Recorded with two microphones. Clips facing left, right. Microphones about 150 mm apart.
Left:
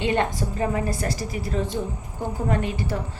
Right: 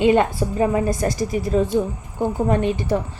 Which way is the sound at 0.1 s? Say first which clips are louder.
Right 6 dB; 20° right (ahead or behind).